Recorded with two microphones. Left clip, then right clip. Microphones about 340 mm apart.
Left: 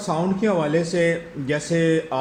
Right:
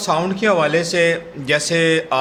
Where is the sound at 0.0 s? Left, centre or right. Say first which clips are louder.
Right 5 dB; right.